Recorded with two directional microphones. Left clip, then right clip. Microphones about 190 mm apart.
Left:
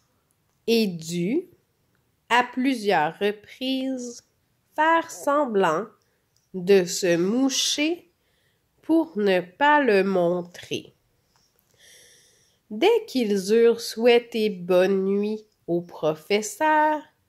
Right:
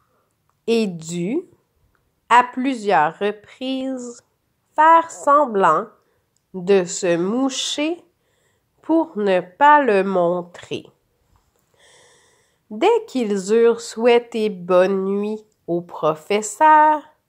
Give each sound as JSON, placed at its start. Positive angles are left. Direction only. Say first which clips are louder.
{"t": 0.7, "sound": "speech", "louder": "right 3 dB", "side_deg": 20}
{"t": 11.7, "sound": "snort", "louder": "right 1 dB", "side_deg": 20}
{"t": 12.0, "sound": "snort", "louder": "right 2 dB", "side_deg": -15}
{"t": 12.7, "sound": "speech", "louder": "right 3 dB", "side_deg": 15}